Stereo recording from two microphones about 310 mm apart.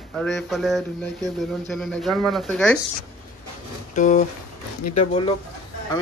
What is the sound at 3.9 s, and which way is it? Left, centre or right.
Speech, left.